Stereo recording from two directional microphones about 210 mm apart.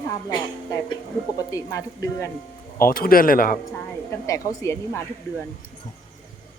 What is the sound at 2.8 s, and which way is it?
Speech, 45° left (ahead or behind).